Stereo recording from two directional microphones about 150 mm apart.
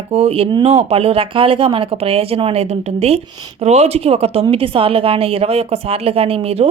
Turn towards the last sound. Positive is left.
turn(degrees=-45)  # may be behind; listen again after turning